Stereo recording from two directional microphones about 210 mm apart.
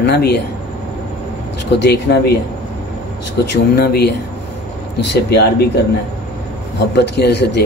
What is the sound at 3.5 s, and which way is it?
Speech, 50° left (ahead or behind).